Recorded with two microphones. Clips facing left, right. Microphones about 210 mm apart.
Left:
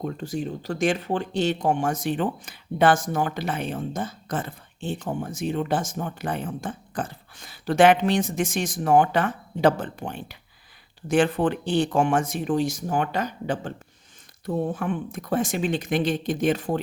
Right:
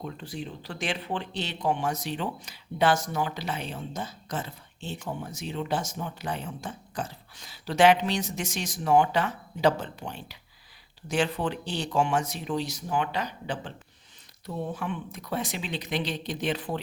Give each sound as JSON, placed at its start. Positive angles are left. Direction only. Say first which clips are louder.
{"t": 0.0, "sound": "speech", "louder": "left 7 dB", "side_deg": 45}